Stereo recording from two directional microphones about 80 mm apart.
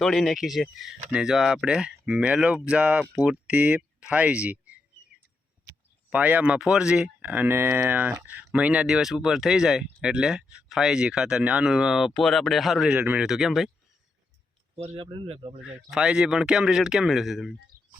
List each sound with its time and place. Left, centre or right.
0.0 s speech: centre
6.1 s speech: centre
12.1 s speech: centre
12.9 s speech: centre
13.2 s speech: centre
14.9 s speech: right
15.9 s speech: centre